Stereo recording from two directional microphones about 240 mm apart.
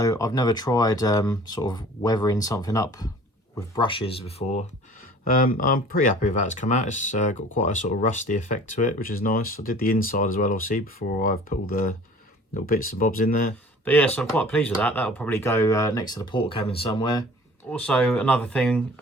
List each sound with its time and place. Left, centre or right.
0.0 s speech: centre
5.2 s speech: left
13.8 s speech: centre
17.7 s speech: centre